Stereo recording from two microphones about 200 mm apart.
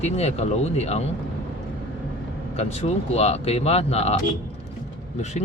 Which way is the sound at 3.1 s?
30° left (ahead or behind).